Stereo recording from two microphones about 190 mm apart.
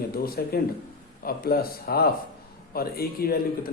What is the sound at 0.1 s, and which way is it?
A man's voice, 50° left (ahead or behind).